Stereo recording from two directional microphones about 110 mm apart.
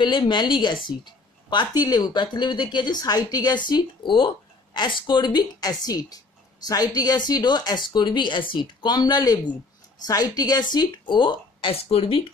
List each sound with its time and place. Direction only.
0.0 s a woman's voice: 45° left (ahead or behind)